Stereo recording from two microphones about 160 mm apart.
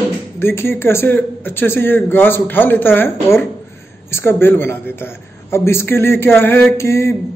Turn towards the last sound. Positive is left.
turn(degrees=15)  # may be behind; listen again after turning